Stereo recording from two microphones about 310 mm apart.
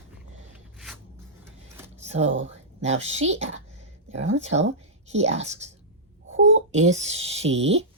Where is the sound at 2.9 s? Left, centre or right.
Right.